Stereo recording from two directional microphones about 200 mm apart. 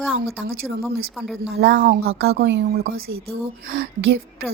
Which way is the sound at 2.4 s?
60° right (ahead or behind).